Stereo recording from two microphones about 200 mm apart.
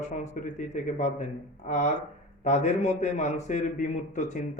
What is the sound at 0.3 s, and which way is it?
Speech, 35° left (ahead or behind).